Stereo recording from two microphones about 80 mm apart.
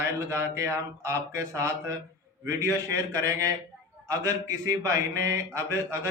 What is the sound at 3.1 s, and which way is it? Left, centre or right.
Speech, right.